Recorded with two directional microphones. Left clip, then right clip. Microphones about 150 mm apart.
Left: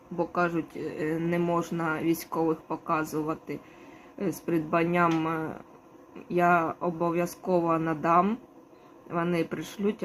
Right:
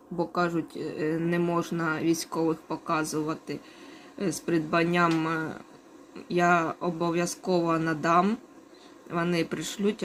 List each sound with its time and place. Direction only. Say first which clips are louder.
0.2 s speech: even; 20° right (ahead or behind)